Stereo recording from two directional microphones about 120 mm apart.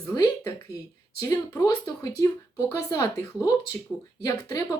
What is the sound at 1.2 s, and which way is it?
Speech, 30° left (ahead or behind).